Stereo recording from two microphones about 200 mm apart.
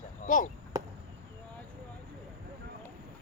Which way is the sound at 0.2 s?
40° left (ahead or behind).